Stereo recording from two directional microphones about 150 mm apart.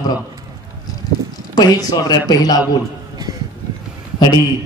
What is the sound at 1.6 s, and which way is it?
A man's voice, 25° left (ahead or behind).